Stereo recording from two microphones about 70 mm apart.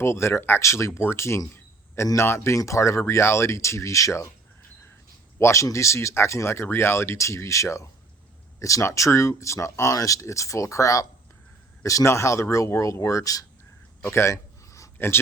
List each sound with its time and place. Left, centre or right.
0.0 s speech: left
5.4 s speech: left
14.0 s a sound: left
14.9 s speech: left